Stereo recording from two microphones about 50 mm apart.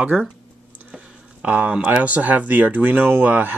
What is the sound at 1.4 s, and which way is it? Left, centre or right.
Speech, right.